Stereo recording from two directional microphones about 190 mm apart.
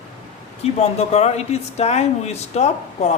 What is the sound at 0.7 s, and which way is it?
Speech, 35° left (ahead or behind).